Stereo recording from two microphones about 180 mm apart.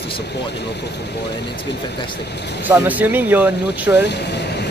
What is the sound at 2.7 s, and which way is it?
Speech, 10° right (ahead or behind).